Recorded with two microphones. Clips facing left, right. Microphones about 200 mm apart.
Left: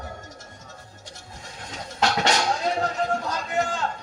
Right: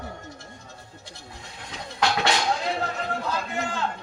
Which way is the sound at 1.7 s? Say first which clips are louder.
Left 1 dB; 45° left (ahead or behind).